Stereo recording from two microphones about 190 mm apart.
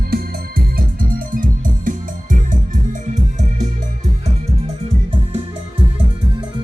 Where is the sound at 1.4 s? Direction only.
45° right (ahead or behind).